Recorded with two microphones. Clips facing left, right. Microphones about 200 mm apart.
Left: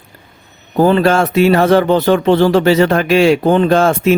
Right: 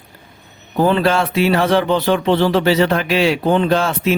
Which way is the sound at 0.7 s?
45° left (ahead or behind).